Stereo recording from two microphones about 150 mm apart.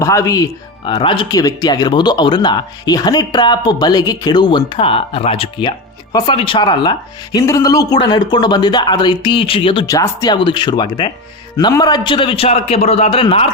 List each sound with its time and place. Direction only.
0.0 s a man's voice: 20° left (ahead or behind); by 9.8 s 35° left (ahead or behind)
9.8 s a man's voice: 25° left (ahead or behind); by 13.5 s 40° left (ahead or behind)